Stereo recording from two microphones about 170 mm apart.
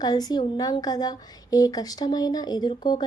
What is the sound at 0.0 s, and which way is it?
Speech, 25° left (ahead or behind).